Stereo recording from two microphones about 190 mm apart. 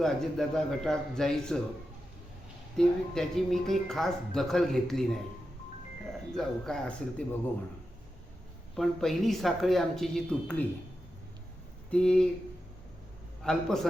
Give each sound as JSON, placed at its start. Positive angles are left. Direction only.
{"t": 0.0, "sound": "speech", "side_deg": 0}
{"t": 2.7, "sound": "speech", "side_deg": 0}
{"t": 6.3, "sound": "speech", "side_deg": 5}
{"t": 8.7, "sound": "speech", "side_deg": 0}
{"t": 11.9, "sound": "speech", "side_deg": 5}
{"t": 13.4, "sound": "speech", "side_deg": 0}